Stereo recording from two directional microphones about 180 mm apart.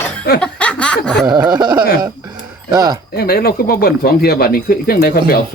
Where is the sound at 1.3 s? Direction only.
20° right (ahead or behind).